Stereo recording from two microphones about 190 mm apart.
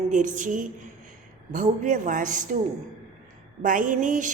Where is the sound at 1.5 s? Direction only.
40° right (ahead or behind).